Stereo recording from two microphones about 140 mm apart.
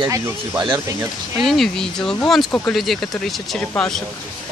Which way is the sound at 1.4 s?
Centre (ahead or behind).